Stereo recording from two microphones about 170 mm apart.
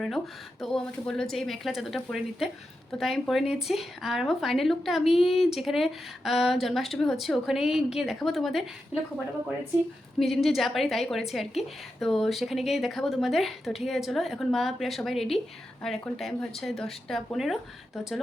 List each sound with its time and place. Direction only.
0.6 s speech: 5° left (ahead or behind)
10.2 s speech: centre (ahead or behind)